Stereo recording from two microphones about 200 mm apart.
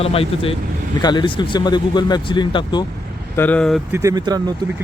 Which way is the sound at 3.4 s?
5° left (ahead or behind).